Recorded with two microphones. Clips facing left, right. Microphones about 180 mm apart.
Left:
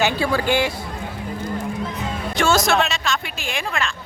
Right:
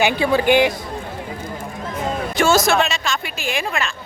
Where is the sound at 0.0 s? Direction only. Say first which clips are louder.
Right 3 dB; 20° right (ahead or behind).